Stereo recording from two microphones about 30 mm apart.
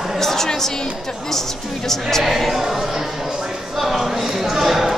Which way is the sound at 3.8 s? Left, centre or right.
Centre.